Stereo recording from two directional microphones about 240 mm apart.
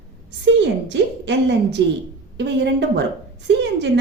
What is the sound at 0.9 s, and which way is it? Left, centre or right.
A woman's voice, right.